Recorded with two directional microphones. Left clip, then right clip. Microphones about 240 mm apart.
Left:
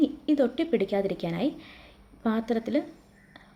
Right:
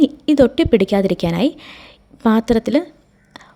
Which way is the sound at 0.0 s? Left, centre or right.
Right.